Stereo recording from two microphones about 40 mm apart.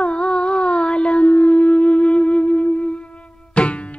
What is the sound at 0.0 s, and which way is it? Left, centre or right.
Humming, left.